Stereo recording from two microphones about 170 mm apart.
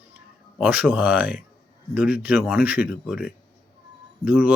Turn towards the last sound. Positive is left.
turn(degrees=-10)  # may be behind; listen again after turning